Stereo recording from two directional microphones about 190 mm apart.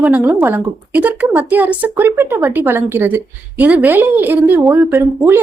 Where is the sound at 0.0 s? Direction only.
10° right (ahead or behind).